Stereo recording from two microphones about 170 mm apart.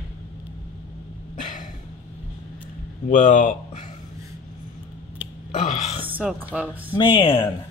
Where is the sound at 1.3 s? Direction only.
50° left (ahead or behind).